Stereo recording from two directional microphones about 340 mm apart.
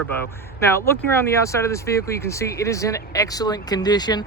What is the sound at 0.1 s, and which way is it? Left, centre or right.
Speech, centre.